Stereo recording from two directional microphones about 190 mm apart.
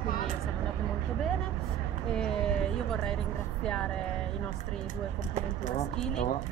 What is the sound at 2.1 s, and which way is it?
Speech, 5° left (ahead or behind).